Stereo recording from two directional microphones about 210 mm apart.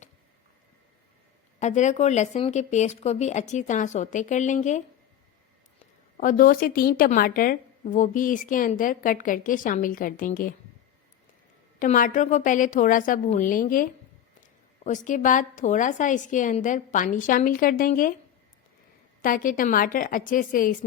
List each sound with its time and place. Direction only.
1.5 s a woman's voice: 35° left (ahead or behind)
6.1 s a woman's voice: 40° left (ahead or behind)
11.8 s a woman's voice: 40° left (ahead or behind)
19.2 s a woman's voice: 40° left (ahead or behind)